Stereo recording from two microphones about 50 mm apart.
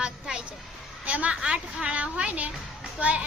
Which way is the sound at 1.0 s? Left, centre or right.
Right.